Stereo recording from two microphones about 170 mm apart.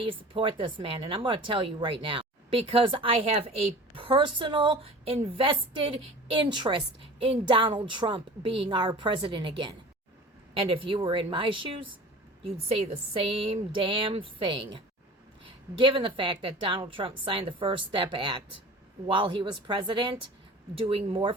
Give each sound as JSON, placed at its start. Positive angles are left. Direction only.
{"t": 0.0, "sound": "a woman's voice", "side_deg": -30}